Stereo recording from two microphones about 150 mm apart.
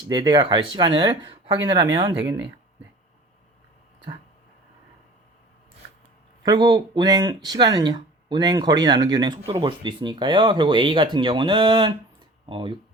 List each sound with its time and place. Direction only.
0.1 s speech: 30° right (ahead or behind)
6.4 s speech: 25° right (ahead or behind)